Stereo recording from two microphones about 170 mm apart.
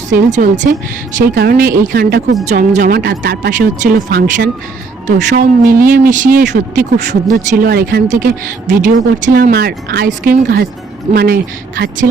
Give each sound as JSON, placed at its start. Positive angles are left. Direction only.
{"t": 0.1, "sound": "a woman's voice", "side_deg": -45}
{"t": 1.2, "sound": "speech", "side_deg": -60}
{"t": 2.4, "sound": "speech", "side_deg": -45}
{"t": 10.1, "sound": "speech", "side_deg": -55}